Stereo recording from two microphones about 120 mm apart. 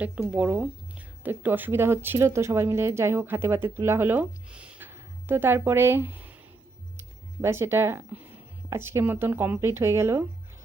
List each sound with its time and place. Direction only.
0.2 s speech: 10° right (ahead or behind)
7.4 s speech: 20° right (ahead or behind)